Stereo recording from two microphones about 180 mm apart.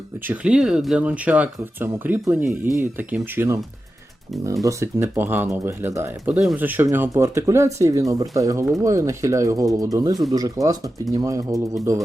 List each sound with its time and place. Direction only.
0.3 s speech: 5° right (ahead or behind)
4.6 s speech: 15° right (ahead or behind)